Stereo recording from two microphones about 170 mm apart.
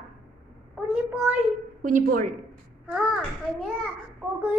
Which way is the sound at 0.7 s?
5° right (ahead or behind).